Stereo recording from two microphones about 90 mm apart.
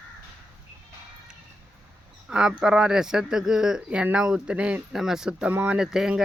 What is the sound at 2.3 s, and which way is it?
Speech, 10° right (ahead or behind).